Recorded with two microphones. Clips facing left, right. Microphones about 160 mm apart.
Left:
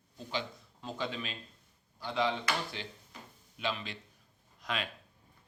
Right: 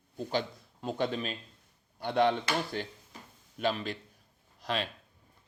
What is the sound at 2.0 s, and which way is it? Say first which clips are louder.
Speech: right 6 dB; 60° right (ahead or behind).